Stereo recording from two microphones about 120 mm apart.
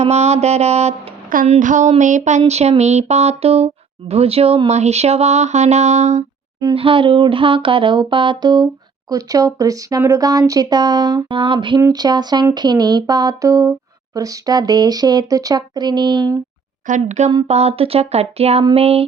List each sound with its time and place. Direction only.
0.0 s speech: 65° right (ahead or behind)
1.5 s a sound: 90° right
2.5 s speech: 65° right (ahead or behind)
6.7 s music: 50° right (ahead or behind)
9.0 s speech: 30° right (ahead or behind)
16.8 s a woman's voice: 85° right
17.5 s speech: 60° right (ahead or behind)